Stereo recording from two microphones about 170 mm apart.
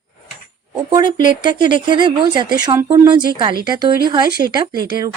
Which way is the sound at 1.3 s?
25° right (ahead or behind).